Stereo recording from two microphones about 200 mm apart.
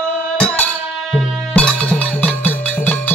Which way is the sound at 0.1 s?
5° left (ahead or behind).